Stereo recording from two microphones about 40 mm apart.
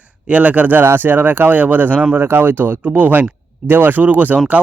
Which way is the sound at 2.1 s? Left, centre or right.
Right.